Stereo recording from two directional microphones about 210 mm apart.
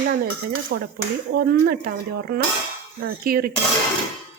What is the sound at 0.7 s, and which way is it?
Speech, 55° right (ahead or behind).